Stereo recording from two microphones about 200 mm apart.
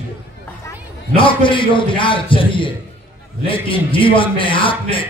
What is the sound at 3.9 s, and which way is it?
A man's voice, 25° left (ahead or behind).